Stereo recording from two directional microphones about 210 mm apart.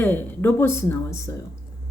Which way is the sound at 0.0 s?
10° left (ahead or behind).